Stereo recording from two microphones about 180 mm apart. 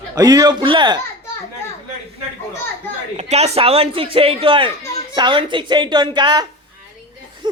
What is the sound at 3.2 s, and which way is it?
A man's voice, 35° right (ahead or behind).